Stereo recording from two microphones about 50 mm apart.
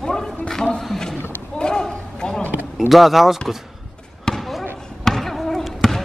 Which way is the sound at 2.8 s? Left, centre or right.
Centre.